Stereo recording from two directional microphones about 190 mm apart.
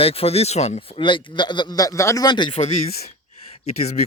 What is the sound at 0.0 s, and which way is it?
Speech, 30° left (ahead or behind).